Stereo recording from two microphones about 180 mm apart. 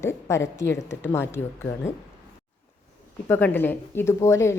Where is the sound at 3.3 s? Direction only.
10° left (ahead or behind).